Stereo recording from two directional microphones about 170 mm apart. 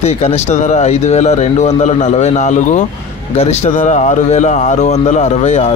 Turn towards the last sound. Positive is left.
turn(degrees=45)  # may be behind; listen again after turning